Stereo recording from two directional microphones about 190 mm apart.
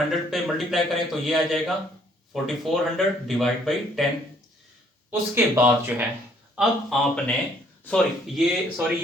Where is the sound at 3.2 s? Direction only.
Centre (ahead or behind).